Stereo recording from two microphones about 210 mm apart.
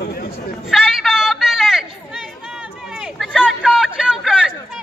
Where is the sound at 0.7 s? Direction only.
Centre (ahead or behind).